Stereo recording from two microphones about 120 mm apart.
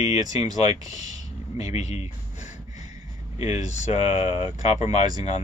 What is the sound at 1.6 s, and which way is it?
Speech, 70° left (ahead or behind).